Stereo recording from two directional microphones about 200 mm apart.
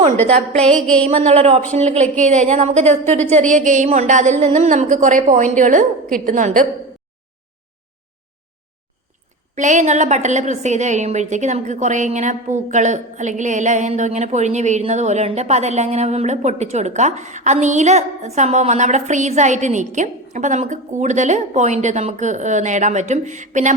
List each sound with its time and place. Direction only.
0.3 s a woman's voice: 30° right (ahead or behind)
0.7 s a sound: 5° left (ahead or behind)
1.0 s a woman's voice: 35° right (ahead or behind)
9.6 s a woman's voice: 35° right (ahead or behind)